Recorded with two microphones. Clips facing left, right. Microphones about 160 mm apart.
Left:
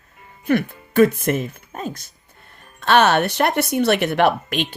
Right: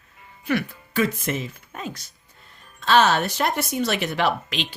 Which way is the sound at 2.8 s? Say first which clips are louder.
Left 3 dB; 60° left (ahead or behind).